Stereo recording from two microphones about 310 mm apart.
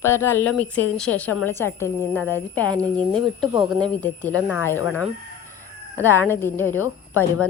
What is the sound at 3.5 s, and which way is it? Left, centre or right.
Speech, centre.